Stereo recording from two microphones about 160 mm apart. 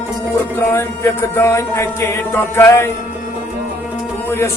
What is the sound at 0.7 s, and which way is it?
Music, 15° left (ahead or behind).